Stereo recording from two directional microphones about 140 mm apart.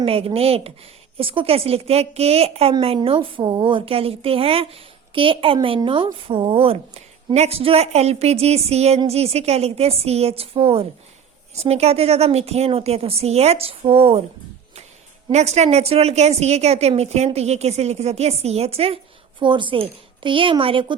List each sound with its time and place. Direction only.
0.0 s a woman's voice: 45° right (ahead or behind)
15.3 s a woman's voice: 50° right (ahead or behind)